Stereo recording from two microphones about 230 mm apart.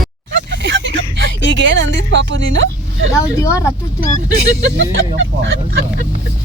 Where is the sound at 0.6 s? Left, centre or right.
Right.